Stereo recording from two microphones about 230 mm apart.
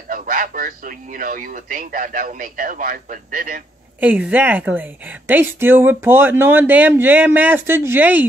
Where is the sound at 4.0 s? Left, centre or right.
Centre.